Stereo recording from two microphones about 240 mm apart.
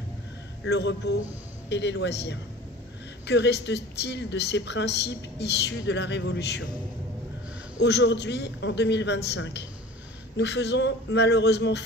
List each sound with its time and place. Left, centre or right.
0.7 s speech: left
7.8 s speech: left